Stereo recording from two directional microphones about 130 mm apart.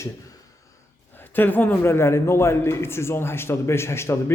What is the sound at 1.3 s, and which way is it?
A man's voice, 15° left (ahead or behind).